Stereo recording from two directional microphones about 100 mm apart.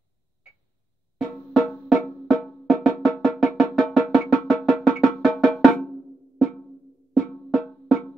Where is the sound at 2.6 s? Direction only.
5° left (ahead or behind).